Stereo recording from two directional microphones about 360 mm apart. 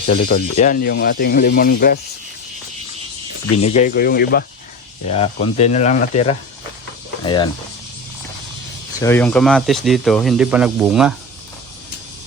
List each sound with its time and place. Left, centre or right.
0.1 s speech: left
3.6 s speech: centre
9.0 s speech: centre